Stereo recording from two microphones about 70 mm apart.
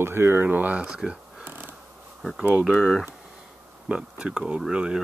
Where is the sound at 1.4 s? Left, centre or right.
Right.